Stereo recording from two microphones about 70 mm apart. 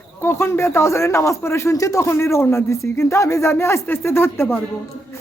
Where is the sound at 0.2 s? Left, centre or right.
Left.